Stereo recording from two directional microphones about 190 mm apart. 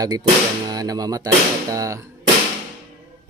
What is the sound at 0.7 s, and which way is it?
Speech, 20° right (ahead or behind).